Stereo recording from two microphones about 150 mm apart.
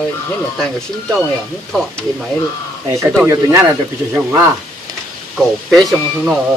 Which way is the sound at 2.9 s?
20° right (ahead or behind).